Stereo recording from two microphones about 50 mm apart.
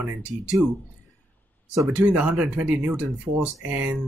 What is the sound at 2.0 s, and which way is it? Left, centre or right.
Speech, right.